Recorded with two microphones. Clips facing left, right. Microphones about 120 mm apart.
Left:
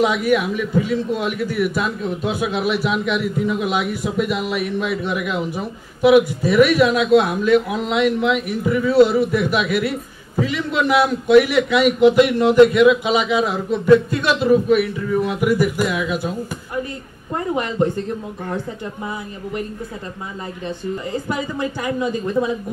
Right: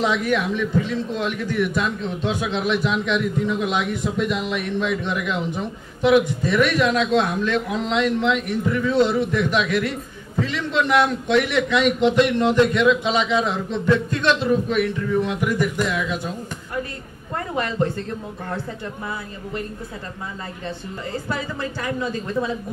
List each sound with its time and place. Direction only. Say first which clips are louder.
0.0 s a man's voice: left 4 dB; 10° left (ahead or behind)
17.4 s a man's voice: left 3 dB; 15° left (ahead or behind)
20.6 s a man's voice: left 6 dB; 15° left (ahead or behind)